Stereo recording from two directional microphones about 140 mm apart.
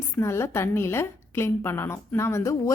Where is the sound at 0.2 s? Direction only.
20° left (ahead or behind).